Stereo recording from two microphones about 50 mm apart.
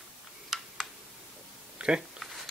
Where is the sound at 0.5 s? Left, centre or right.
Centre.